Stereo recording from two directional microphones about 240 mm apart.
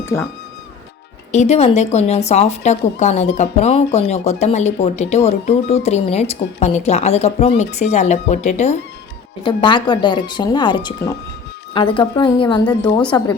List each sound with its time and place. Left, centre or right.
1.3 s speech: left
12.6 s a woman's voice: centre